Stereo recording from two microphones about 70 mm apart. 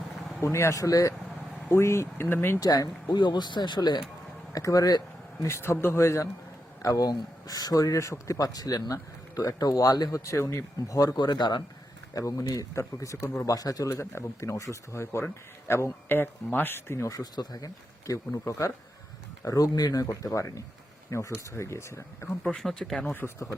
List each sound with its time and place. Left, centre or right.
0.4 s speech: left
1.7 s speech: left
2.6 s speech: left
4.5 s speech: left
6.8 s speech: left
10.2 s speech: left
11.2 s speech: left
12.1 s speech: left
14.0 s speech: left
17.1 s speech: left
18.0 s speech: left
19.5 s speech: left
22.4 s speech: centre